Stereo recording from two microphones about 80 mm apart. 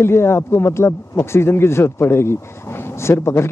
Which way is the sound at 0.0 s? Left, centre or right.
Left.